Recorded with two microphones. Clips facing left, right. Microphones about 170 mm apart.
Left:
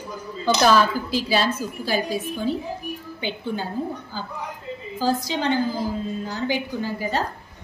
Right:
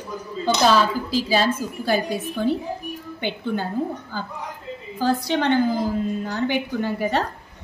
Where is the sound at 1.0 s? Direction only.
35° right (ahead or behind).